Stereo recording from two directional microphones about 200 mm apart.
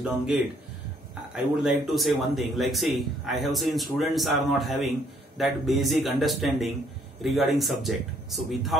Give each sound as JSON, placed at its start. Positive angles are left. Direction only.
{"t": 1.3, "sound": "speech", "side_deg": 0}